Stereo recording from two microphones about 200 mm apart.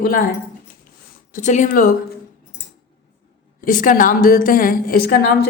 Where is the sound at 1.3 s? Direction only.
40° left (ahead or behind).